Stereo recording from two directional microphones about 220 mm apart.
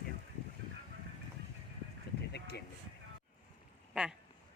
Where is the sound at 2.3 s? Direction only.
50° left (ahead or behind).